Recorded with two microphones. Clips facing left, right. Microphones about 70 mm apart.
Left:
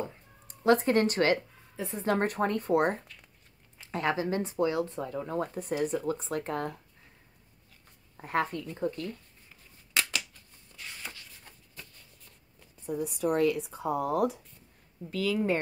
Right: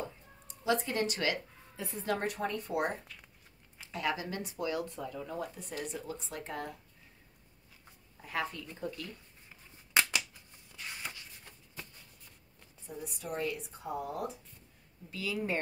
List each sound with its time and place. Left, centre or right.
0.5 s speech: left
1.8 s a woman's voice: left
2.1 s speech: left
8.2 s speech: left
12.0 s a sound: centre
12.8 s speech: left
15.0 s speech: left